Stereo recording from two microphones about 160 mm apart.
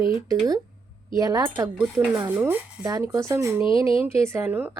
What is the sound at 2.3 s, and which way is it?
A woman's voice, 10° right (ahead or behind).